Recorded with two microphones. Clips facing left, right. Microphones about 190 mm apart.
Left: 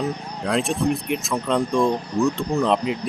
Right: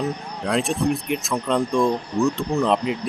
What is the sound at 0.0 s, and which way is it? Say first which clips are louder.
Speech: even; centre (ahead or behind).